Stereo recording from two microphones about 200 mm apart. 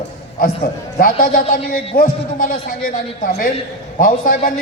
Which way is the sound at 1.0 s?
45° left (ahead or behind).